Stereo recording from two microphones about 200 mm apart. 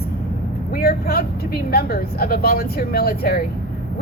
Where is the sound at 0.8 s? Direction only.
50° left (ahead or behind).